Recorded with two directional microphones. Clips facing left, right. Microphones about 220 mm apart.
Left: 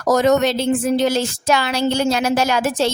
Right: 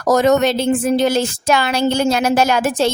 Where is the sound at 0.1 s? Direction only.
55° right (ahead or behind).